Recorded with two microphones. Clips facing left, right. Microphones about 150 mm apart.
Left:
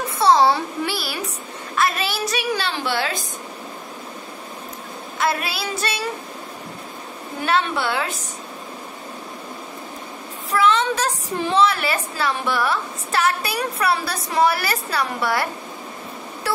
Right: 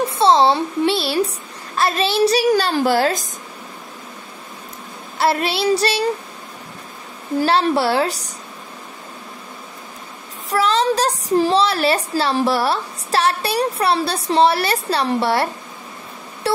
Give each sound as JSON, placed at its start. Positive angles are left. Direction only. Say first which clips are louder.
{"t": 0.0, "sound": "a sound", "louder": "right 2 dB", "side_deg": -25}
{"t": 1.8, "sound": "a woman's voice", "louder": "right 6 dB", "side_deg": -30}
{"t": 5.2, "sound": "a woman's voice", "louder": "right 6 dB", "side_deg": -30}
{"t": 7.3, "sound": "a woman's voice", "louder": "right 5 dB", "side_deg": -35}
{"t": 10.5, "sound": "a woman's voice", "louder": "right 2 dB", "side_deg": -35}